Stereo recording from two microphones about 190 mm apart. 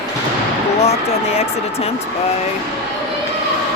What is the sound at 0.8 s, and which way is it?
Speech, 35° left (ahead or behind).